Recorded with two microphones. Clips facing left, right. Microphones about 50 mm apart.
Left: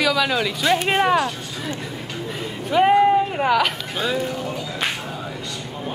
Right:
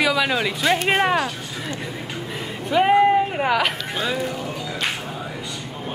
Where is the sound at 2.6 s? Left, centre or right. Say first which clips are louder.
Left 1 dB; centre.